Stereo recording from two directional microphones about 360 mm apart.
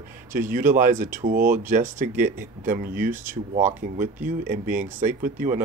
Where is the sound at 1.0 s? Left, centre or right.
Right.